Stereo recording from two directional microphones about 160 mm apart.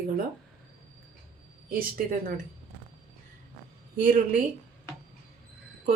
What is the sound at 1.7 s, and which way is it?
Speech, 65° right (ahead or behind).